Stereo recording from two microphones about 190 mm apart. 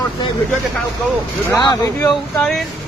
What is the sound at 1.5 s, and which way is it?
Speech, 20° left (ahead or behind).